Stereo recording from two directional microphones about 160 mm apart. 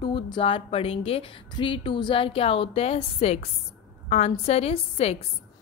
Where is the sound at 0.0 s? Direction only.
30° left (ahead or behind).